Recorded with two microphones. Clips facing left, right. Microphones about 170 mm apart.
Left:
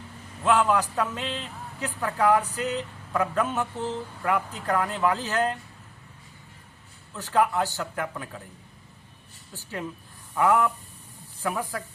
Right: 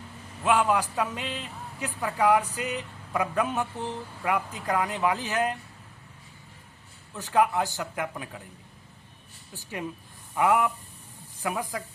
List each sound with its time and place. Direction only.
0.4 s a man's voice: 15° right (ahead or behind)
7.2 s a man's voice: 15° right (ahead or behind)
10.3 s a man's voice: 15° right (ahead or behind)